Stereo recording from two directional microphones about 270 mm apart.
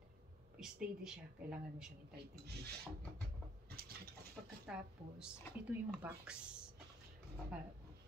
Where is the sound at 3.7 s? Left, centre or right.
Right.